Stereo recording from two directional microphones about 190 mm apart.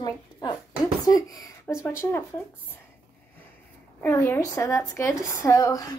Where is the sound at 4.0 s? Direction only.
15° left (ahead or behind).